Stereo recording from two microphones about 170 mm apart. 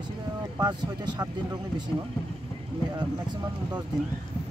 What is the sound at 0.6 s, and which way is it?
Speech, 25° right (ahead or behind).